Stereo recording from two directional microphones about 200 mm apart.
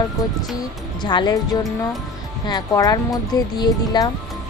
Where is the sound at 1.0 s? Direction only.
20° left (ahead or behind).